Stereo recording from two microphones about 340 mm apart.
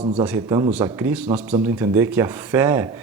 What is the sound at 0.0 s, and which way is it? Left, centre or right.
Speech, centre.